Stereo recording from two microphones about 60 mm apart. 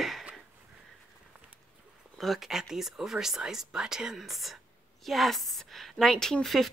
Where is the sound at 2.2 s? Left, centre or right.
Centre.